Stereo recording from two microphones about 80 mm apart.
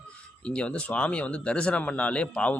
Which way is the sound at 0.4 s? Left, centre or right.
Centre.